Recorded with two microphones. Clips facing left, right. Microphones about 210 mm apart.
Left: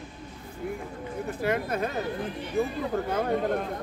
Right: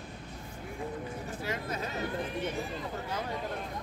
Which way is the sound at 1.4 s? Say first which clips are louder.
Left 9 dB; 60° left (ahead or behind).